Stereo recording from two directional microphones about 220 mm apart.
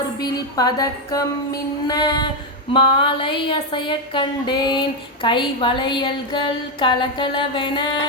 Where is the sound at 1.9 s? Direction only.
20° left (ahead or behind).